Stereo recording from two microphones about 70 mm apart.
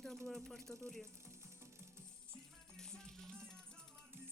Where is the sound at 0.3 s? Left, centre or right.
Centre.